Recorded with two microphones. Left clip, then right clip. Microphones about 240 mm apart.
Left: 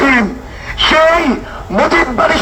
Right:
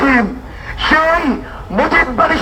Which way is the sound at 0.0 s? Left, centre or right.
Left.